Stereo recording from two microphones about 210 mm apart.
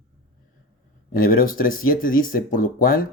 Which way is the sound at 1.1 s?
40° left (ahead or behind).